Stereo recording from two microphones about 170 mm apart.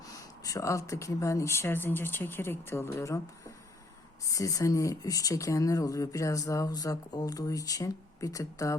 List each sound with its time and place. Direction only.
0.2 s speech: 20° left (ahead or behind)